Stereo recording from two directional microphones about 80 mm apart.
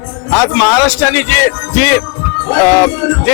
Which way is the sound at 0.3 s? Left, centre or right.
Left.